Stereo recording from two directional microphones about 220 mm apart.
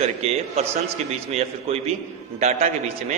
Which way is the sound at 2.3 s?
30° right (ahead or behind).